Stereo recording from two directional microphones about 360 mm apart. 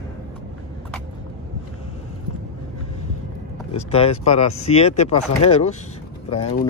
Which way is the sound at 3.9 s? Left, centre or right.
Centre.